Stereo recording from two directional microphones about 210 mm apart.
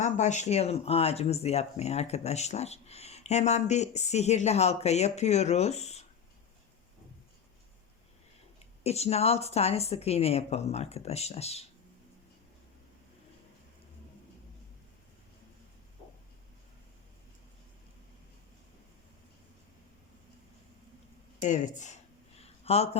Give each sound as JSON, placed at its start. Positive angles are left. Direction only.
{"t": 0.0, "sound": "speech", "side_deg": 35}
{"t": 8.5, "sound": "speech", "side_deg": 30}
{"t": 21.4, "sound": "speech", "side_deg": 35}
{"t": 22.4, "sound": "a sound", "side_deg": 30}